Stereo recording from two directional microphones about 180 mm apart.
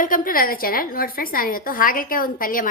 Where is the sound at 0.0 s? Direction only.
50° left (ahead or behind).